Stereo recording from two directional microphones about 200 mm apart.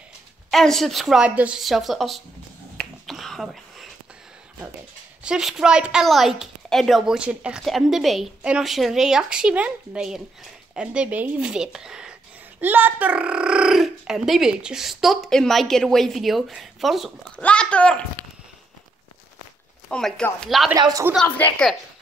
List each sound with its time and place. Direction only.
0.5 s speech: centre (ahead or behind)
2.8 s finger snapping: centre (ahead or behind)
5.2 s speech: 5° right (ahead or behind)
19.9 s speech: 5° left (ahead or behind)
20.7 s speech: 15° right (ahead or behind)
21.1 s speech: 5° left (ahead or behind)